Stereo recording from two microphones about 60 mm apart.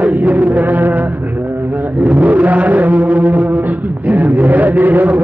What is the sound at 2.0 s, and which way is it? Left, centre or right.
Vehicle, right.